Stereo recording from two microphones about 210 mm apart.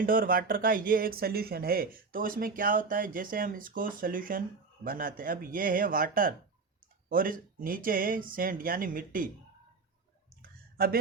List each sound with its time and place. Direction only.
0.0 s speech: 40° right (ahead or behind)